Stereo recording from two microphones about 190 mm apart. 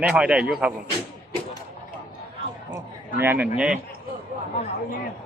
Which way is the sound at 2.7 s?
10° right (ahead or behind).